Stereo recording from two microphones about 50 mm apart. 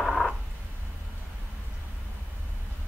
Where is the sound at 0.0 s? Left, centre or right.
Centre.